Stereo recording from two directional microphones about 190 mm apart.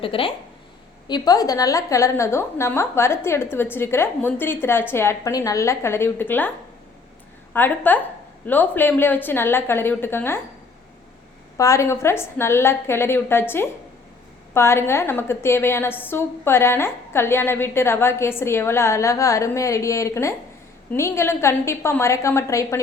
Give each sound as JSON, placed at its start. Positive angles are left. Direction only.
{"t": 0.0, "sound": "a woman's voice", "side_deg": 30}
{"t": 7.5, "sound": "a woman's voice", "side_deg": 10}
{"t": 11.5, "sound": "a woman's voice", "side_deg": 15}